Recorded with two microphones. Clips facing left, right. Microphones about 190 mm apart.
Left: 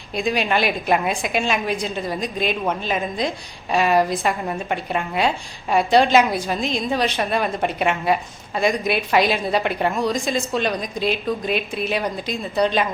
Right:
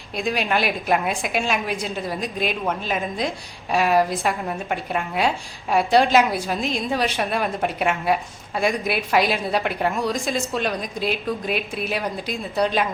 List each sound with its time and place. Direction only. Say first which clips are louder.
0.2 s a woman's voice: left 2 dB; centre (ahead or behind)